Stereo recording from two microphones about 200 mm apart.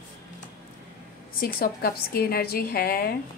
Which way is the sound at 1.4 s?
50° left (ahead or behind).